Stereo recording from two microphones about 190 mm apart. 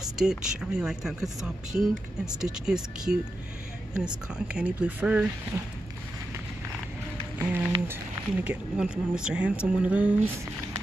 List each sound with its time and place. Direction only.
0.0 s speech: 5° right (ahead or behind)
7.3 s speech: 10° right (ahead or behind)